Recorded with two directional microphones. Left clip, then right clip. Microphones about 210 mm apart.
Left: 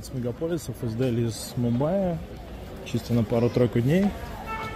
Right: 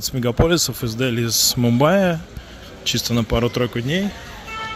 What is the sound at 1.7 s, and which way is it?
Speech, 15° right (ahead or behind).